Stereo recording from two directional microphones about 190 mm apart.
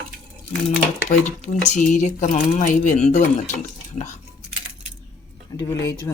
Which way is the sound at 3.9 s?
40° left (ahead or behind).